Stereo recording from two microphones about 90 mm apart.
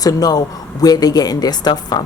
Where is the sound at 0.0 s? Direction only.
45° left (ahead or behind).